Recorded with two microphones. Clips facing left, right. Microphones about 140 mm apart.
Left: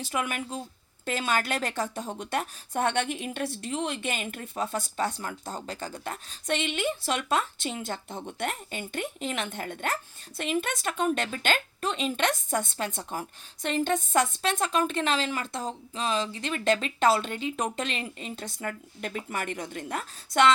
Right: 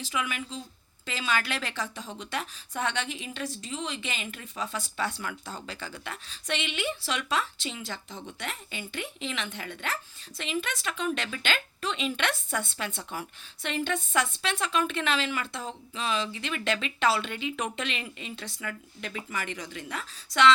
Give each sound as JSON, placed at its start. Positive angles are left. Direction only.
{"t": 0.0, "sound": "a woman's voice", "side_deg": 50}